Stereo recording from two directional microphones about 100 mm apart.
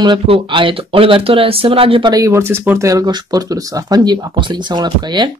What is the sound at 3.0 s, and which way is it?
Speech, 45° right (ahead or behind).